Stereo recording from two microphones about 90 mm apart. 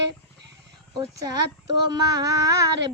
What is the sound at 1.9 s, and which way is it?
Female singing, 45° right (ahead or behind).